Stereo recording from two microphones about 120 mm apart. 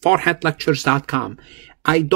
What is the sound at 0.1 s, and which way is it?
Speech, 15° right (ahead or behind).